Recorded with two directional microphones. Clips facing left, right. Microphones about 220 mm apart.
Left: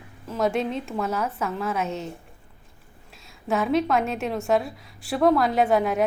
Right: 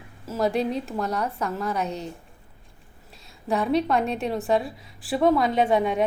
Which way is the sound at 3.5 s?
Centre (ahead or behind).